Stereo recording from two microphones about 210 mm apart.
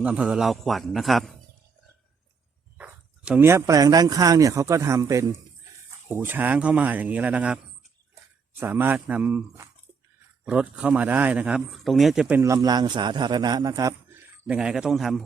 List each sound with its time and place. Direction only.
0.0 s speech: 5° right (ahead or behind)
2.7 s a man's voice: 5° right (ahead or behind)
12.4 s a man's voice: 15° right (ahead or behind); by 15.2 s centre (ahead or behind)